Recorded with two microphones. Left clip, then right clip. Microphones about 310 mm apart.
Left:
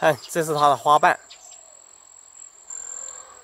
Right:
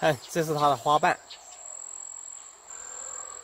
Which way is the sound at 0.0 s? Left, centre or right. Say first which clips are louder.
Left 5 dB; left.